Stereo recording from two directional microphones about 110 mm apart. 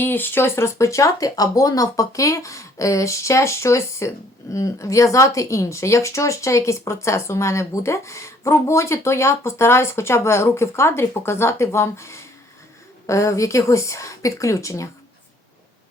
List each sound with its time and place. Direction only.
0.0 s speech: 20° left (ahead or behind)